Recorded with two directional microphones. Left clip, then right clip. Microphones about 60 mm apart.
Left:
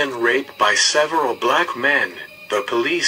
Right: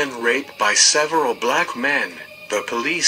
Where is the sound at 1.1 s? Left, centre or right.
Centre.